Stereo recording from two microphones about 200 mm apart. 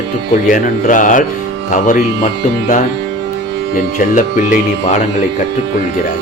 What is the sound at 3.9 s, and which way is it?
A man's voice, 40° left (ahead or behind).